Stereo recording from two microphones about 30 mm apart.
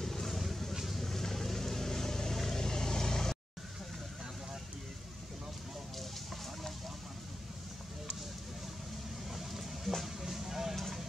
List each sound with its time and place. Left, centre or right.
0.0 s vehicle: centre
0.8 s boat: centre
1.1 s vehicle: centre
10.0 s a sound: centre